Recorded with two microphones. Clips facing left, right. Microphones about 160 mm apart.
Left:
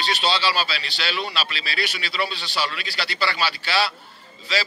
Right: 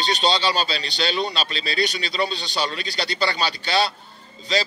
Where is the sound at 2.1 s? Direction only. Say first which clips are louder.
Right 2 dB; 35° right (ahead or behind).